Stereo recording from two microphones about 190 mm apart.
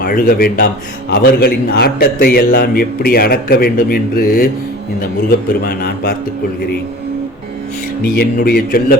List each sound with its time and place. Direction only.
0.0 s a man's voice: 50° left (ahead or behind)
5.6 s a man's voice: 55° left (ahead or behind)
8.0 s a man's voice: 50° left (ahead or behind)